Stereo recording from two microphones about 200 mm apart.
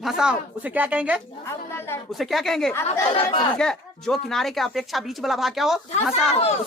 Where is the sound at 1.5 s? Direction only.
10° left (ahead or behind).